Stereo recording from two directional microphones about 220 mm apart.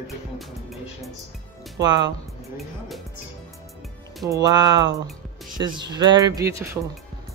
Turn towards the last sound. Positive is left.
turn(degrees=-15)  # may be behind; listen again after turning